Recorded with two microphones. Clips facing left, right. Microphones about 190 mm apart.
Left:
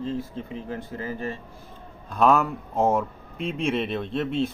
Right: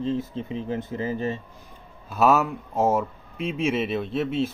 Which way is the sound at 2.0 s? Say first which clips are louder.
Even; 5° right (ahead or behind).